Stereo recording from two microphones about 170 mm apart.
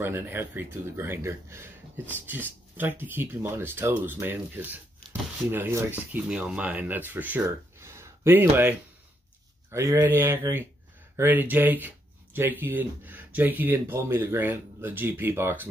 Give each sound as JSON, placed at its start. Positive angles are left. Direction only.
{"t": 0.0, "sound": "speech", "side_deg": -10}
{"t": 7.4, "sound": "a sound", "side_deg": -15}
{"t": 9.7, "sound": "speech", "side_deg": -15}